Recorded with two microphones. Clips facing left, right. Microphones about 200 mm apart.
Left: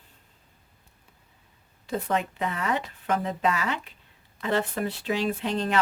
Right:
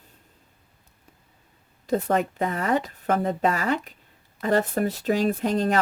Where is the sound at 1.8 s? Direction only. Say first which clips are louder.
Right 5 dB; 40° right (ahead or behind).